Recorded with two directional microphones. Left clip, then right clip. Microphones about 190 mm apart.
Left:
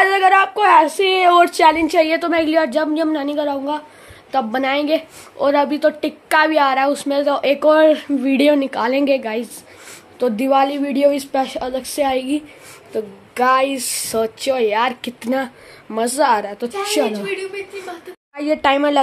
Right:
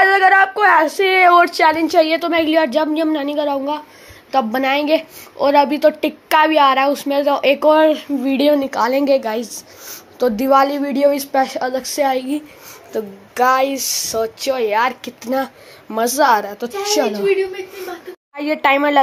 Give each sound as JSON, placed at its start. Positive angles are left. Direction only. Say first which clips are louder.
{"t": 0.0, "sound": "a woman's voice", "louder": "right 2 dB", "side_deg": 5}
{"t": 15.2, "sound": "a woman's voice", "louder": "right 1 dB", "side_deg": 10}
{"t": 18.3, "sound": "a woman's voice", "louder": "right 1 dB", "side_deg": 15}